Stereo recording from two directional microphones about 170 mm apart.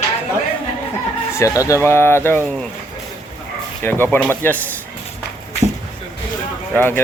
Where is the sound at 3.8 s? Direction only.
10° left (ahead or behind).